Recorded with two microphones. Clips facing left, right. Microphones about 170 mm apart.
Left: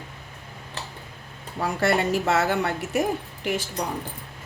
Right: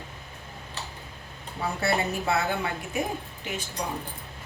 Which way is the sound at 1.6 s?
90° left.